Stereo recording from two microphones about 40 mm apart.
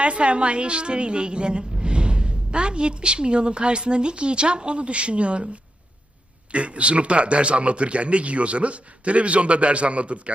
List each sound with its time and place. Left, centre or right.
0.0 s a woman's voice: right
6.5 s a man's voice: right